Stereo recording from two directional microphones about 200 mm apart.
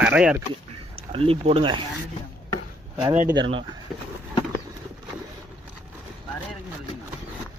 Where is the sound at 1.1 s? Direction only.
30° right (ahead or behind).